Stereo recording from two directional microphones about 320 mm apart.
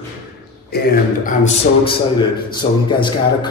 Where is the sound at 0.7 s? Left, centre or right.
Left.